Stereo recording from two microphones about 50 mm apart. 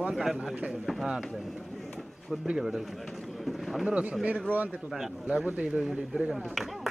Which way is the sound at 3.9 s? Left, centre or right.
Right.